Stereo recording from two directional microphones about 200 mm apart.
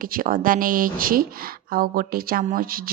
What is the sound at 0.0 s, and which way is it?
Speech, 45° right (ahead or behind).